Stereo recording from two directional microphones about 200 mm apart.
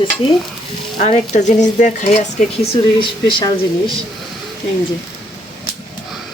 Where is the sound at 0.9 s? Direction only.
35° left (ahead or behind).